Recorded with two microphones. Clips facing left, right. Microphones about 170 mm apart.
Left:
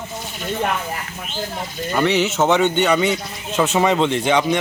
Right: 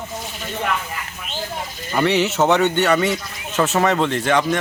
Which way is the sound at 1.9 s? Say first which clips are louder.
Even; 5° right (ahead or behind).